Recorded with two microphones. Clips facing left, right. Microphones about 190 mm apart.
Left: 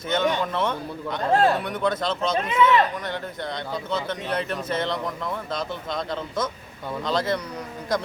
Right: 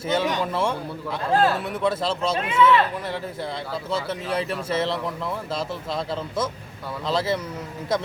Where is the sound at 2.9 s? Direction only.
5° right (ahead or behind).